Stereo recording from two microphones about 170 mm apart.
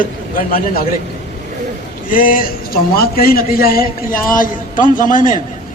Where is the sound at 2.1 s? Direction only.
55° left (ahead or behind).